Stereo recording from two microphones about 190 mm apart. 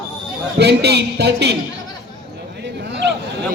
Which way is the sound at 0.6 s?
60° right (ahead or behind).